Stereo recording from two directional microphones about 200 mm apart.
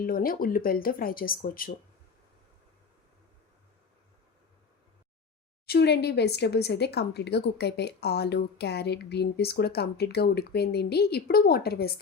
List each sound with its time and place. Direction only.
0.0 s speech: 45° left (ahead or behind)
5.6 s speech: 55° left (ahead or behind)